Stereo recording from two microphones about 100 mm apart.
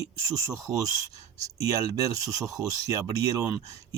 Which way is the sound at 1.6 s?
35° right (ahead or behind).